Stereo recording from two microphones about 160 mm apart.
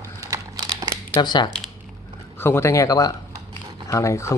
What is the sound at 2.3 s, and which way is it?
Speech, 15° left (ahead or behind).